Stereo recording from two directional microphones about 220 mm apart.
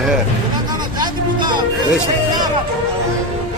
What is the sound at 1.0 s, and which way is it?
Vehicle, 20° right (ahead or behind).